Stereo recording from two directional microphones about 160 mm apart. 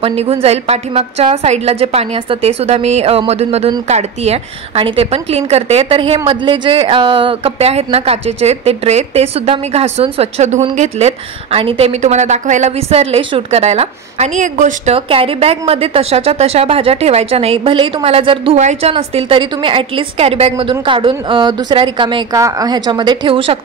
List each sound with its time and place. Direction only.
0.0 s a woman's voice: 35° right (ahead or behind)
12.0 s a woman's voice: 45° right (ahead or behind)
15.0 s a woman's voice: 35° right (ahead or behind)
18.6 s a woman's voice: 45° right (ahead or behind)